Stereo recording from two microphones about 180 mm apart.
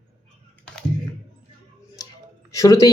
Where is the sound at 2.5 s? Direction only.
20° left (ahead or behind).